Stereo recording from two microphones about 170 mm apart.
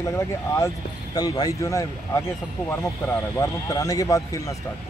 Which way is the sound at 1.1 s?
25° left (ahead or behind).